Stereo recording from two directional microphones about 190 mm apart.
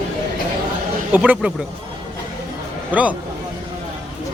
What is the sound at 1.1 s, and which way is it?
Speech, 10° right (ahead or behind).